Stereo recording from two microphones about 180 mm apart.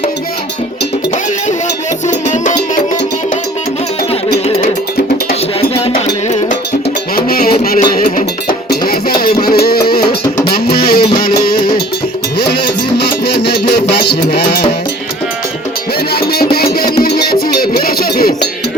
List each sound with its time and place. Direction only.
2.0 s music: 40° left (ahead or behind)
5.3 s music: 35° left (ahead or behind)
7.2 s music: 55° left (ahead or behind)
13.2 s music: 65° left (ahead or behind)
16.2 s music: 60° left (ahead or behind)